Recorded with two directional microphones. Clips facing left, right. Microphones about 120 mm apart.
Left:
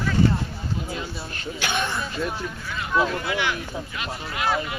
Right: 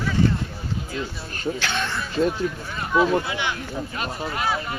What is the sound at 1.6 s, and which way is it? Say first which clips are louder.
Speech: left 1 dB; 15° left (ahead or behind).